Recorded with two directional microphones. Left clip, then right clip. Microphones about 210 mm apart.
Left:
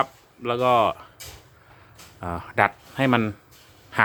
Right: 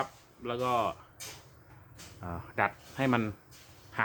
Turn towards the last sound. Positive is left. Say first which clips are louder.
# left 11 dB
turn(degrees=50)  # may be behind; listen again after turning